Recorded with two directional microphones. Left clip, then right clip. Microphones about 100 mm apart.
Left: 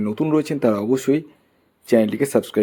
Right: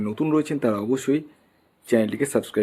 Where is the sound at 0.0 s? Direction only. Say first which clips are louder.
Left 3 dB; 25° left (ahead or behind).